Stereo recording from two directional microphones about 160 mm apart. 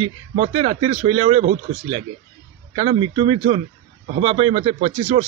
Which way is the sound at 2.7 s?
40° right (ahead or behind).